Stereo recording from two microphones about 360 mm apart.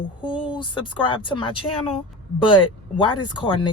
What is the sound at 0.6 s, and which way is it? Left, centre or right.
Speech, centre.